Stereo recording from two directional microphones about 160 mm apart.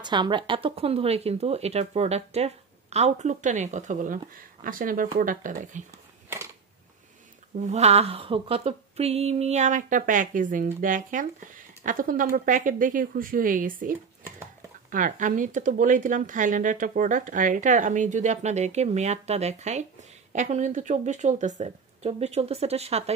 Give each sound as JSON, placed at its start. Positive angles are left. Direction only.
{"t": 0.0, "sound": "speech", "side_deg": -30}
{"t": 7.6, "sound": "speech", "side_deg": -45}